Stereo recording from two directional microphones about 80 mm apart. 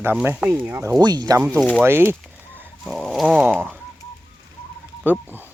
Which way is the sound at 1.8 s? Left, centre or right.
Right.